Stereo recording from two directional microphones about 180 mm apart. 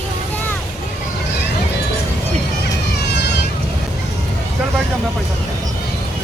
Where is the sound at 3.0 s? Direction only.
70° left (ahead or behind).